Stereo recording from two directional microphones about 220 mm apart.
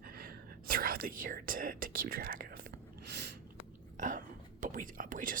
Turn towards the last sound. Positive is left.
turn(degrees=-35)  # may be behind; listen again after turning